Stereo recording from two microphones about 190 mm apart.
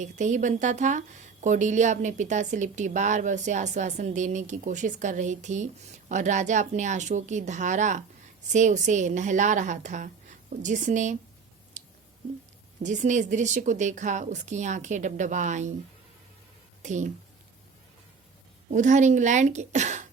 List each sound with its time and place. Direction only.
0.0 s a woman's voice: 40° right (ahead or behind)
11.8 s a sound: 40° right (ahead or behind)
12.8 s a woman's voice: 40° right (ahead or behind)
16.8 s a woman's voice: 40° right (ahead or behind)
18.7 s a woman's voice: 40° right (ahead or behind)